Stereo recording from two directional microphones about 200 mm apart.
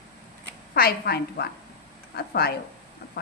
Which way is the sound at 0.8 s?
50° left (ahead or behind).